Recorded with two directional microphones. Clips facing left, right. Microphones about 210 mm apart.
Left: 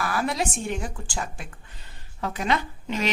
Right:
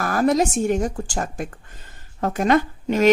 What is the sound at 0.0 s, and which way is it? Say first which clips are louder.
Speech: right 8 dB; 45° right (ahead or behind).